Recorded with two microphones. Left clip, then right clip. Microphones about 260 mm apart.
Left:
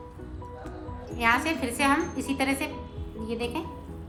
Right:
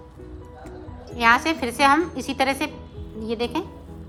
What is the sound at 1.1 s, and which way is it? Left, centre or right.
A woman's voice, centre.